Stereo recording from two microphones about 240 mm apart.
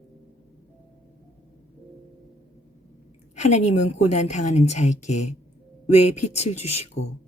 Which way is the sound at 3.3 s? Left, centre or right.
Left.